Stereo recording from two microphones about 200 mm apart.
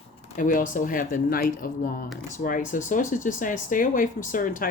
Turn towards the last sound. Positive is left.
turn(degrees=40)  # may be behind; listen again after turning